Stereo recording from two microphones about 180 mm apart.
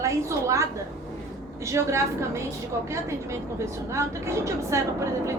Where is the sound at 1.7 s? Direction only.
15° right (ahead or behind).